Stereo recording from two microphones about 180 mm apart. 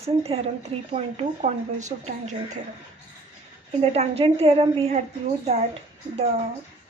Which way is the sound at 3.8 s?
35° right (ahead or behind).